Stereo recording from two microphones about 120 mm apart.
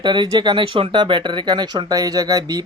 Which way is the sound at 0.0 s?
40° right (ahead or behind).